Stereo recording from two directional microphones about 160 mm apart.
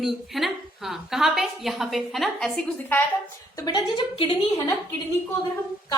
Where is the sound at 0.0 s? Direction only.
Centre (ahead or behind).